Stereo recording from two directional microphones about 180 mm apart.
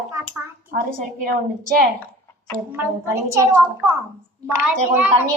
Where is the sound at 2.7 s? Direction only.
15° right (ahead or behind).